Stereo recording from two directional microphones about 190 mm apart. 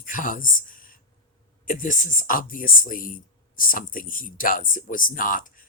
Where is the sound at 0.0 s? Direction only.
45° left (ahead or behind).